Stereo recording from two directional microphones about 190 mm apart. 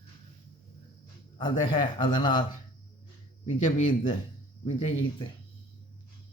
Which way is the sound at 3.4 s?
40° left (ahead or behind).